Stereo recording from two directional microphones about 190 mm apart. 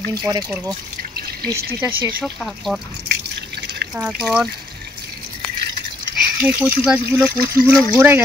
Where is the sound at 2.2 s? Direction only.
Centre (ahead or behind).